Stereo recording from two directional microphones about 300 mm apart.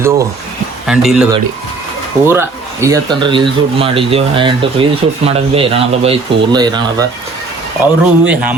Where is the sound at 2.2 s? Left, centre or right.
Centre.